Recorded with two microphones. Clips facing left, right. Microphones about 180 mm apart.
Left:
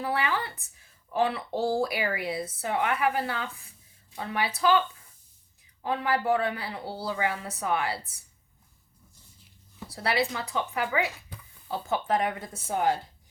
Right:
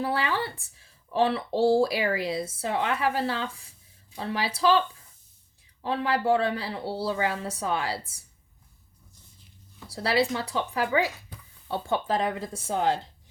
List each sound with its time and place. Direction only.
0.0 s speech: 30° right (ahead or behind)
5.8 s speech: 30° right (ahead or behind)
9.9 s speech: 30° right (ahead or behind)